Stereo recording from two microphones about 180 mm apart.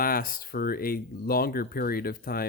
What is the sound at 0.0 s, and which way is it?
Speech, 55° left (ahead or behind).